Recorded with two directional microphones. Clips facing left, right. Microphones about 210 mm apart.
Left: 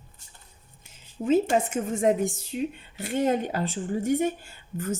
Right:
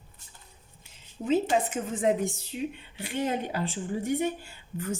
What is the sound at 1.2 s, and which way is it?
Speech, 45° left (ahead or behind).